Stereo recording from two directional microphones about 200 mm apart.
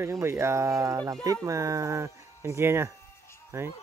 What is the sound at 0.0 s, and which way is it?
Speech, 15° right (ahead or behind).